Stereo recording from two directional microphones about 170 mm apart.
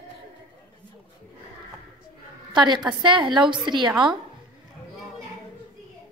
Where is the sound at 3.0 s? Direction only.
30° right (ahead or behind).